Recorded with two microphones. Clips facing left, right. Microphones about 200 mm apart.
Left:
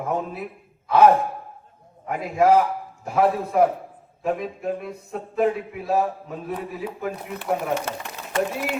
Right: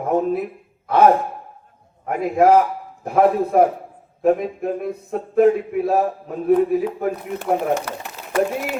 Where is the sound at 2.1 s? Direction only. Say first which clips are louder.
Right 3 dB; 55° right (ahead or behind).